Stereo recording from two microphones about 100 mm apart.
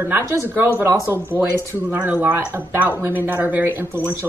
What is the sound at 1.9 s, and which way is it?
A woman's voice, 15° right (ahead or behind).